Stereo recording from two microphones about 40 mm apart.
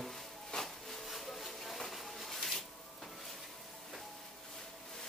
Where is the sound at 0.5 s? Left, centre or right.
Centre.